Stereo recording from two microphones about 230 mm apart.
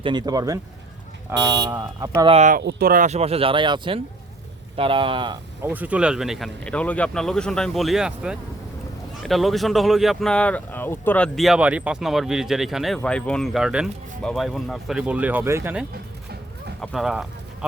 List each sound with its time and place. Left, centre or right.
0.0 s speech: centre
1.7 s speech: centre
5.6 s speech: centre